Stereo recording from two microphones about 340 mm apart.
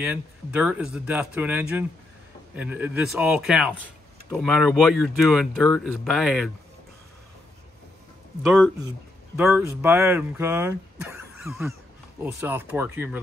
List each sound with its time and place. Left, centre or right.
0.0 s speech: centre
8.5 s speech: centre